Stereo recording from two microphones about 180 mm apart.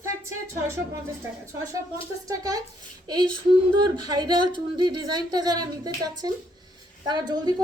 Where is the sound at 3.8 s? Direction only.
25° right (ahead or behind).